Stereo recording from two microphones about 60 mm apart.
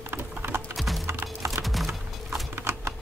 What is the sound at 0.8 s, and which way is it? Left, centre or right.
Clip-clop, centre.